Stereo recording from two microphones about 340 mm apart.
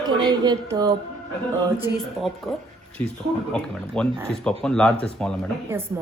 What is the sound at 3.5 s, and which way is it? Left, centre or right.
Speech, centre.